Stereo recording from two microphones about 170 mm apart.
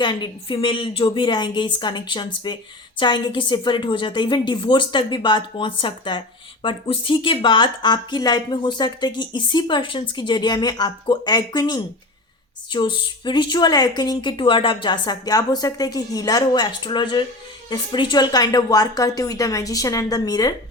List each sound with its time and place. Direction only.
0.0 s a woman's voice: 25° left (ahead or behind)